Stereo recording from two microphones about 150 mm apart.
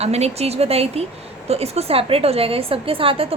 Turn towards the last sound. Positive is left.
turn(degrees=-35)  # may be behind; listen again after turning